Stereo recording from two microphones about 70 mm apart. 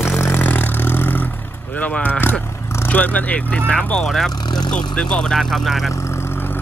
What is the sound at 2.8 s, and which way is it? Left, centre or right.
Speech, left.